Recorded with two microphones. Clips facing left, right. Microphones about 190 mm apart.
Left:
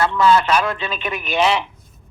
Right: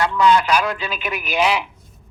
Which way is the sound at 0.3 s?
10° right (ahead or behind).